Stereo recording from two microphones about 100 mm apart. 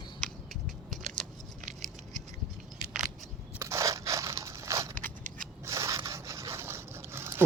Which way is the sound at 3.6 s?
30° right (ahead or behind).